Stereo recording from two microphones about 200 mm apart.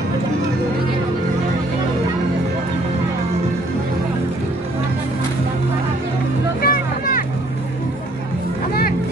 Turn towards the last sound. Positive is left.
turn(degrees=45)  # may be behind; listen again after turning